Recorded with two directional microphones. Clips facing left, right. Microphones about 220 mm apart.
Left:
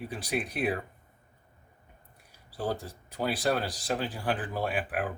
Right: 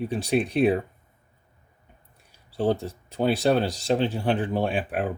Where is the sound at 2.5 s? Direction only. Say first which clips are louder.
Right 9 dB; 25° right (ahead or behind).